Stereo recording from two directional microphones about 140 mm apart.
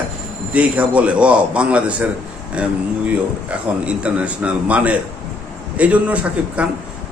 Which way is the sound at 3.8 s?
10° right (ahead or behind).